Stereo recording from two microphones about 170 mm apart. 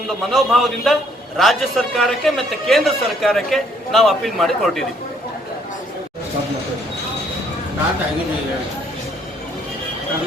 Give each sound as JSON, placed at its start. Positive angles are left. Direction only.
{"t": 0.3, "sound": "a man's voice", "side_deg": 0}